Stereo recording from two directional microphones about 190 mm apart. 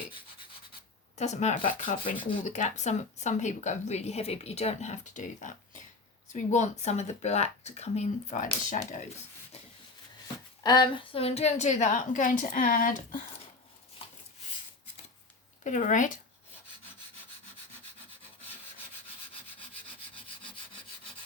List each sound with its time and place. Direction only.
1.1 s speech: 35° left (ahead or behind)
10.6 s speech: 20° left (ahead or behind); by 13.2 s 45° left (ahead or behind)
15.6 s speech: 40° left (ahead or behind)